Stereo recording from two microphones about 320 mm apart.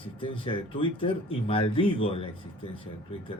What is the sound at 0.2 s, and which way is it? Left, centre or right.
Speech, centre.